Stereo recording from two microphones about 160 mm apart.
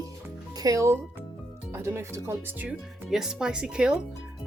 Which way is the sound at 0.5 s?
20° right (ahead or behind).